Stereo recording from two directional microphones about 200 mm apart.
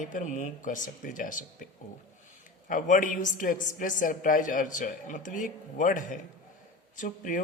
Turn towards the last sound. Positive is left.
turn(degrees=40)  # may be behind; listen again after turning